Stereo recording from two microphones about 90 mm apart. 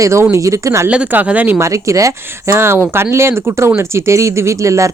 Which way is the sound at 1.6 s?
35° right (ahead or behind).